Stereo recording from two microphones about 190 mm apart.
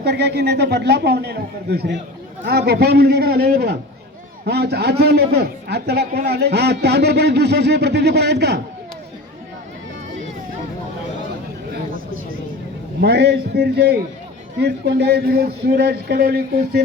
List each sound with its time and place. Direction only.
0.0 s a man's voice: 60° right (ahead or behind)
13.0 s a man's voice: 60° right (ahead or behind)